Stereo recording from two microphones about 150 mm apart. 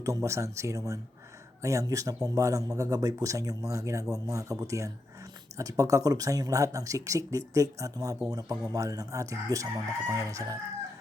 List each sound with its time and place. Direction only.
0.0 s speech: 20° right (ahead or behind)